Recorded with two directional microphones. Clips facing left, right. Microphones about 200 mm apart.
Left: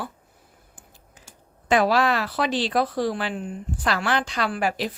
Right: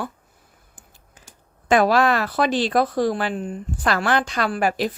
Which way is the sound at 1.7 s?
50° right (ahead or behind).